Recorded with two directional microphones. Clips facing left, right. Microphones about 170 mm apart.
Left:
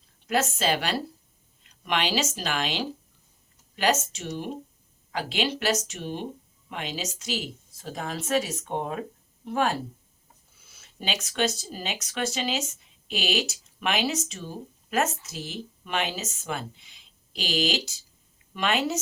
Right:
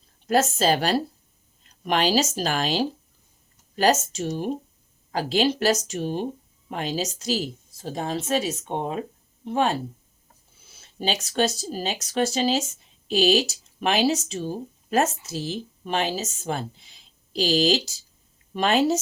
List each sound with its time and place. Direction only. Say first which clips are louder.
0.3 s a woman's voice: right 5 dB; 40° right (ahead or behind)
10.8 s speech: right 5 dB; 35° right (ahead or behind)